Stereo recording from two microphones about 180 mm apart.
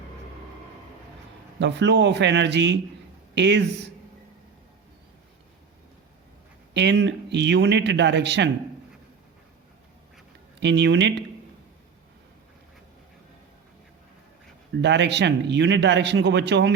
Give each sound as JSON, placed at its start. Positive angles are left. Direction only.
{"t": 1.5, "sound": "speech", "side_deg": -75}
{"t": 6.7, "sound": "speech", "side_deg": -75}
{"t": 10.6, "sound": "speech", "side_deg": -75}
{"t": 14.8, "sound": "speech", "side_deg": -75}